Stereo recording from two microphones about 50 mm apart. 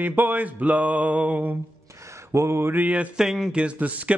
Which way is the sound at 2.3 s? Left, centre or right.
Right.